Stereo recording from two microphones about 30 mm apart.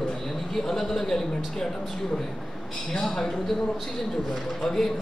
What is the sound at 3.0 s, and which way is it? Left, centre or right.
Speech, centre.